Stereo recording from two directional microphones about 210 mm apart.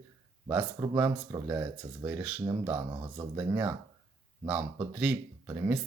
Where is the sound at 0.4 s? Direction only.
15° right (ahead or behind).